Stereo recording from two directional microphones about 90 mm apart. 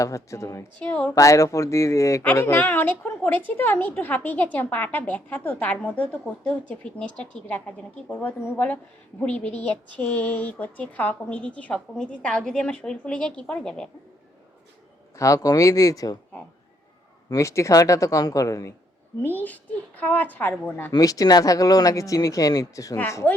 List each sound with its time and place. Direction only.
0.0 s speech: 35° left (ahead or behind)
0.8 s a woman's voice: 15° left (ahead or behind)
1.1 s a woman's voice: 35° left (ahead or behind); by 13.9 s 10° left (ahead or behind)
15.2 s speech: 40° left (ahead or behind)
17.2 s speech: 35° left (ahead or behind)
20.0 s speech: 20° left (ahead or behind)
20.9 s speech: 40° left (ahead or behind)